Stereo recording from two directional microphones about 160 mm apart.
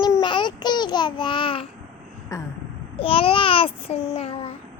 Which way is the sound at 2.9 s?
35° left (ahead or behind).